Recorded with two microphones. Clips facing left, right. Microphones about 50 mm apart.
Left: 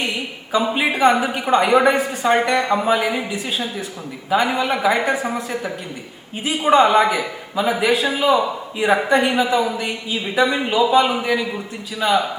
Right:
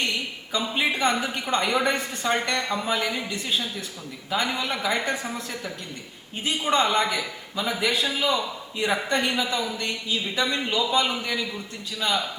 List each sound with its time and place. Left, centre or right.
0.0 s a sound: centre
0.6 s a woman's voice: centre
5.1 s a woman's voice: centre